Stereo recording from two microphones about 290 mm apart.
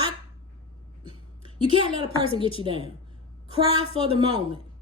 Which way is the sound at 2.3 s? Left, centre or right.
Centre.